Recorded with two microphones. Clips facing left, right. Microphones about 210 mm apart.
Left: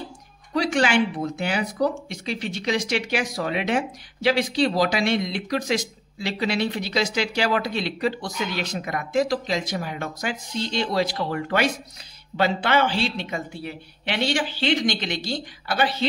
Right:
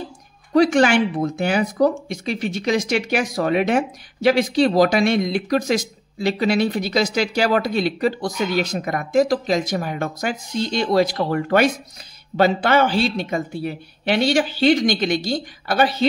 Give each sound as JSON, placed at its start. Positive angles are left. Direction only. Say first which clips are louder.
{"t": 0.6, "sound": "speech", "louder": "right 6 dB", "side_deg": -45}